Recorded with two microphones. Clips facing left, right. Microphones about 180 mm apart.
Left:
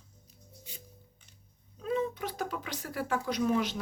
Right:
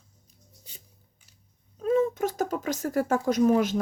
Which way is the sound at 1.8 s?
45° right (ahead or behind).